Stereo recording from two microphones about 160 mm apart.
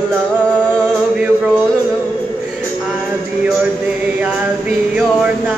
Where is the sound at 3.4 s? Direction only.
10° right (ahead or behind).